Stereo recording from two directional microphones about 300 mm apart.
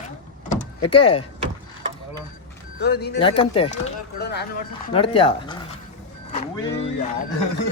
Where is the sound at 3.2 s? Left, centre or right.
Centre.